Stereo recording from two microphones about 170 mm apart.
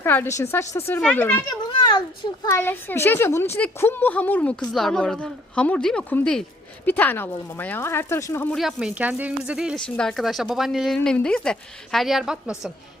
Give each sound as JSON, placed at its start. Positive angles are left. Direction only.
{"t": 0.0, "sound": "a woman's voice", "side_deg": 10}
{"t": 1.8, "sound": "a child's voice", "side_deg": 25}
{"t": 2.6, "sound": "a woman's voice", "side_deg": 10}
{"t": 8.5, "sound": "speech", "side_deg": -5}